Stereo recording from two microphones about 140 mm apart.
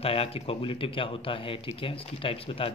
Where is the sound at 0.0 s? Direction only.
45° left (ahead or behind).